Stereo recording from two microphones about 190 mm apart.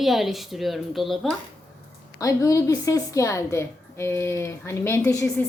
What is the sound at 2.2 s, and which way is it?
A woman's voice, 15° left (ahead or behind).